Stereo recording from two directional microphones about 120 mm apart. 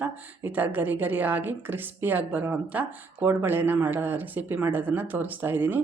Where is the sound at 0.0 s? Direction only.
15° right (ahead or behind).